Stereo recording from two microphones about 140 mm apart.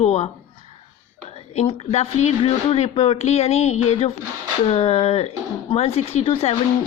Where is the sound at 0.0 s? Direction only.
55° left (ahead or behind).